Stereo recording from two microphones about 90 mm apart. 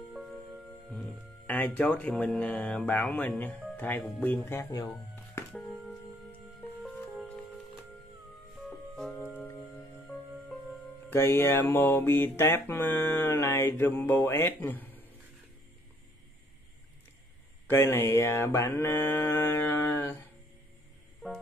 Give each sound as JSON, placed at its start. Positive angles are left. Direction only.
{"t": 0.1, "sound": "music", "side_deg": -5}
{"t": 1.5, "sound": "speech", "side_deg": 15}
{"t": 3.7, "sound": "mantra", "side_deg": 20}
{"t": 4.6, "sound": "speech", "side_deg": 35}
{"t": 5.5, "sound": "music", "side_deg": 5}
{"t": 6.8, "sound": "music", "side_deg": -10}
{"t": 8.6, "sound": "music", "side_deg": 5}
{"t": 11.1, "sound": "mantra", "side_deg": 25}
{"t": 17.6, "sound": "mantra", "side_deg": 30}